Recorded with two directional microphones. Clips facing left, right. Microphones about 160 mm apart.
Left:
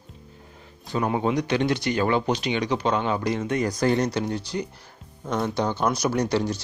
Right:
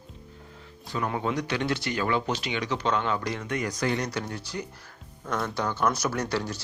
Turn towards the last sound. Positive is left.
turn(degrees=20)  # may be behind; listen again after turning